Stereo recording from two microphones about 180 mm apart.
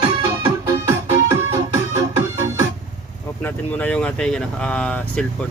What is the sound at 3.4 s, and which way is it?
Speech, 10° left (ahead or behind).